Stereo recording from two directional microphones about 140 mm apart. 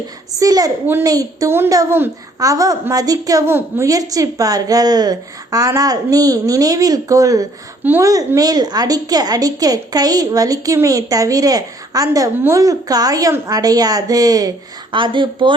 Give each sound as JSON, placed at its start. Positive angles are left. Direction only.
{"t": 0.3, "sound": "a woman's voice", "side_deg": -25}